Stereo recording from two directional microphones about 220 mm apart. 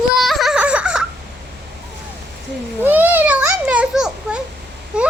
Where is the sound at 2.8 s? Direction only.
10° right (ahead or behind).